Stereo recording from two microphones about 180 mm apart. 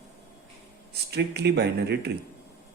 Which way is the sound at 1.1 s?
65° right (ahead or behind).